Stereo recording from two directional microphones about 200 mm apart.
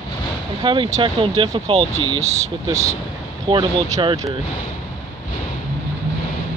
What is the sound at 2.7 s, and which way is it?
Speech, 15° right (ahead or behind).